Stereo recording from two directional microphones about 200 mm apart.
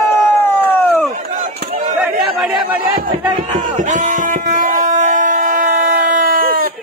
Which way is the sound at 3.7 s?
35° right (ahead or behind).